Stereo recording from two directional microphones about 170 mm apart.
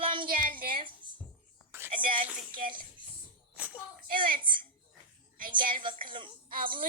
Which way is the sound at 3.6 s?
10° right (ahead or behind).